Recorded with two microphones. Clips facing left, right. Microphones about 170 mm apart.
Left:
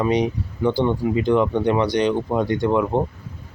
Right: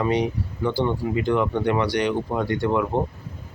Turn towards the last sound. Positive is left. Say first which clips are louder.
# left 3 dB
turn(degrees=20)  # may be behind; listen again after turning